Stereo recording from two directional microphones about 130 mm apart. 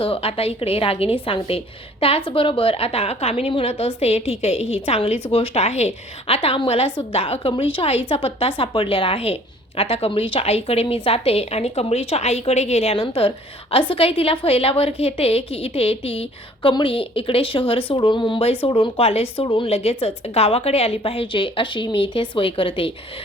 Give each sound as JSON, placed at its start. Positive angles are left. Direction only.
{"t": 0.0, "sound": "a woman's voice", "side_deg": 45}